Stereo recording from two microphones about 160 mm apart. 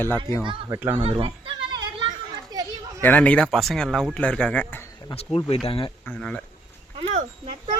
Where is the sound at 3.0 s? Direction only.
10° left (ahead or behind).